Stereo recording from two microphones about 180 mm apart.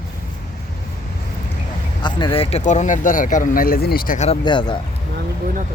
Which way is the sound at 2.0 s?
25° left (ahead or behind).